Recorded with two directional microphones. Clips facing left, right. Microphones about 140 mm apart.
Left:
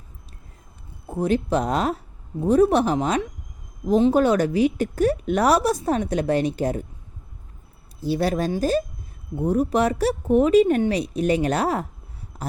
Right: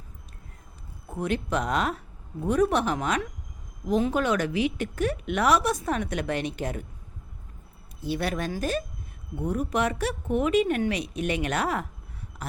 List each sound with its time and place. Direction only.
1.0 s speech: 30° left (ahead or behind)
8.0 s speech: 30° left (ahead or behind)
12.4 s a sound: 35° left (ahead or behind)